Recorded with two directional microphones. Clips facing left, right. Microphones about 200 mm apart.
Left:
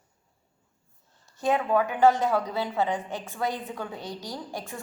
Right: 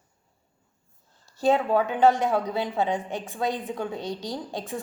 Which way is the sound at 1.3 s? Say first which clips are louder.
Right 2 dB; 30° right (ahead or behind).